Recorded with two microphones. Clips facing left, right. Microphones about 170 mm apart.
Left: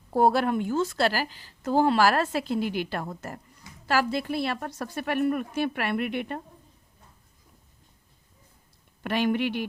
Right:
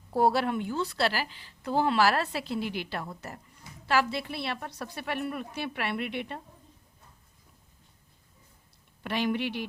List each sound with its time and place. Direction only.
0.1 s a woman's voice: 50° left (ahead or behind)
9.0 s a woman's voice: 55° left (ahead or behind)